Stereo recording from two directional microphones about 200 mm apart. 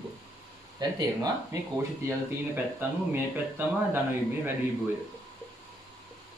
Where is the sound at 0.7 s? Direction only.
20° right (ahead or behind).